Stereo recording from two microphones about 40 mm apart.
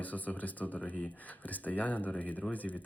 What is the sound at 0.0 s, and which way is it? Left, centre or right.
Speech, left.